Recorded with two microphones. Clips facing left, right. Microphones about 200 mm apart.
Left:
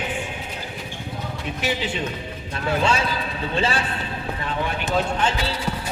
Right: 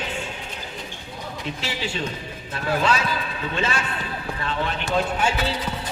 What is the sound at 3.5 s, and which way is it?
Speech, 35° left (ahead or behind).